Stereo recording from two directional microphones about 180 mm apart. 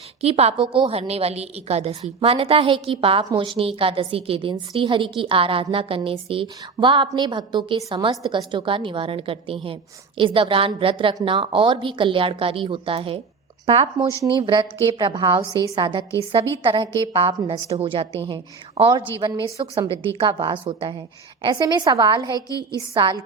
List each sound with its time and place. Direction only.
0.2 s a woman's voice: 35° right (ahead or behind)
14.1 s a woman's voice: 15° left (ahead or behind)
14.4 s a woman's voice: 25° right (ahead or behind)
22.4 s a woman's voice: 20° left (ahead or behind)
23.0 s a woman's voice: 25° right (ahead or behind)